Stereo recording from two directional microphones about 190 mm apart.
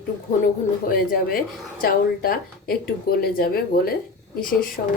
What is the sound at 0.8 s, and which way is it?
Speech, 50° left (ahead or behind).